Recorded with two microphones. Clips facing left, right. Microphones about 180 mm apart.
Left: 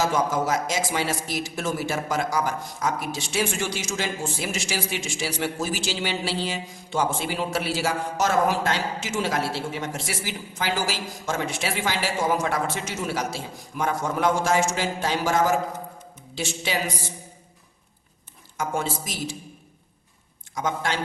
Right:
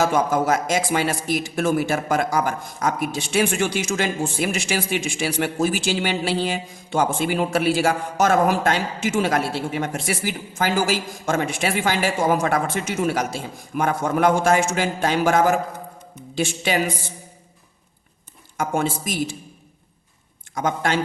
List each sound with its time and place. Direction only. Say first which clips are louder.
0.0 s a man's voice: right 4 dB; 55° right (ahead or behind)
18.5 s a man's voice: right 4 dB; 55° right (ahead or behind)
20.6 s speech: right 4 dB; 55° right (ahead or behind)